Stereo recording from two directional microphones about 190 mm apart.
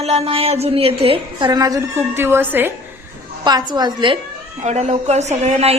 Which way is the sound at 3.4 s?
20° right (ahead or behind).